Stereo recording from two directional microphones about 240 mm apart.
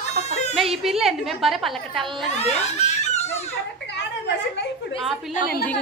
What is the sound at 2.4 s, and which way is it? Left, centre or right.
Giggle, left.